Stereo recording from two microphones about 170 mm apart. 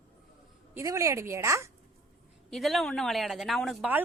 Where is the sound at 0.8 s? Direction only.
20° right (ahead or behind).